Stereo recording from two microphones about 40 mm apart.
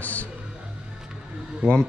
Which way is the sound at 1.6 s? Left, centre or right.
Right.